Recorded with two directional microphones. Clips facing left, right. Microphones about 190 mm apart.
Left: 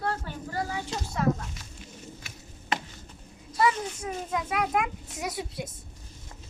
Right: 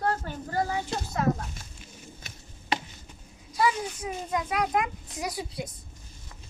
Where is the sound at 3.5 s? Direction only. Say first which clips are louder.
Left 1 dB; centre (ahead or behind).